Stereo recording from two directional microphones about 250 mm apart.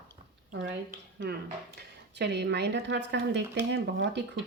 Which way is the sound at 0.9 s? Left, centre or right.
Right.